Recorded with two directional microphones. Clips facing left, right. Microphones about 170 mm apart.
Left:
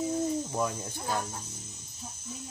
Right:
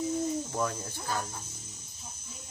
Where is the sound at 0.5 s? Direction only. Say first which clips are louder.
Left 1 dB; 15° left (ahead or behind).